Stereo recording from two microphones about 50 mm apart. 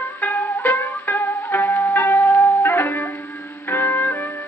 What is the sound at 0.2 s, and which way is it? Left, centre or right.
Music, left.